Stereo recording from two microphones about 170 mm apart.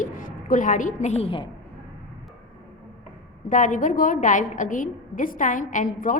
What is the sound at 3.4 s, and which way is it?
A woman's voice, 50° left (ahead or behind).